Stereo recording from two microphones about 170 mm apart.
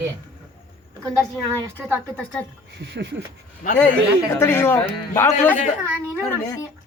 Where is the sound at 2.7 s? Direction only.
90° right.